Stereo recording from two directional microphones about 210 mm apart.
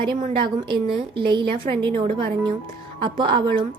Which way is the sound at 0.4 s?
20° right (ahead or behind).